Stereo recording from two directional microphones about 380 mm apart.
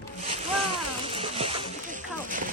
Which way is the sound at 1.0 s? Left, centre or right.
Centre.